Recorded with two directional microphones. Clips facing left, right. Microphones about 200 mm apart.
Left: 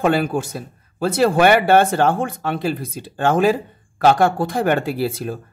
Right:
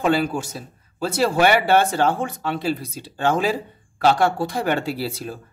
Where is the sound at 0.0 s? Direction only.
55° left (ahead or behind).